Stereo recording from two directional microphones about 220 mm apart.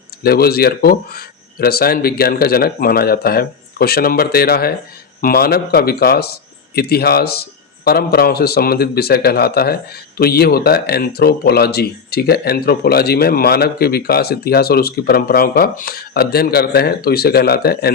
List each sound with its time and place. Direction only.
0.2 s a man's voice: 45° left (ahead or behind)